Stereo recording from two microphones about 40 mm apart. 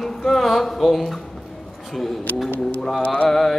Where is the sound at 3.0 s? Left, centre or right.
Left.